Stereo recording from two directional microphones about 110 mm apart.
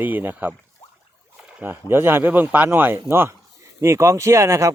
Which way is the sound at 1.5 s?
20° right (ahead or behind).